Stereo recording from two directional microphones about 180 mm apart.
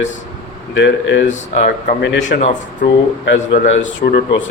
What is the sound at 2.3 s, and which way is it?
Speech, 40° left (ahead or behind).